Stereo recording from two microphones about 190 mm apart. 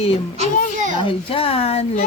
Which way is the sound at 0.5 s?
45° left (ahead or behind).